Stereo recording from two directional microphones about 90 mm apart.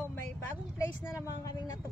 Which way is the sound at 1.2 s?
40° left (ahead or behind).